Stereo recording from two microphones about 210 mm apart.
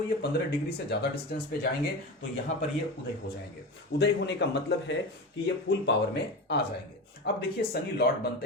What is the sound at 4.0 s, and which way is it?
Speech, 55° left (ahead or behind).